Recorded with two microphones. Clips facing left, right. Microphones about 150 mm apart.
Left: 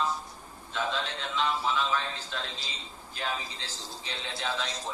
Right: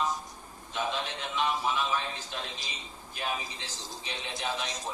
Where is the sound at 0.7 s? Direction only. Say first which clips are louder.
Left 1 dB; 15° right (ahead or behind).